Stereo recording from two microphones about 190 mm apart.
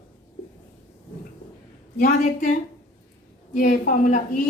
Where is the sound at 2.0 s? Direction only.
40° left (ahead or behind).